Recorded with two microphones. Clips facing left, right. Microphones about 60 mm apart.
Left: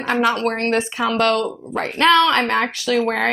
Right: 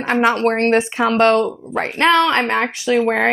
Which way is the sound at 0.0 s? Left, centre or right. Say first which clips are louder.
Right 3 dB; right.